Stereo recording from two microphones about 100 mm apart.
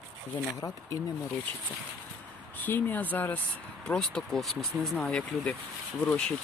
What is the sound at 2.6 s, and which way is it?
Speech, 20° left (ahead or behind).